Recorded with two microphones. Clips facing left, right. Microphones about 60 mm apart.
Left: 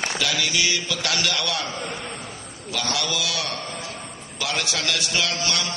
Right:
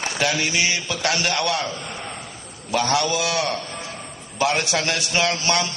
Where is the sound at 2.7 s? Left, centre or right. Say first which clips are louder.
Right 6 dB; right.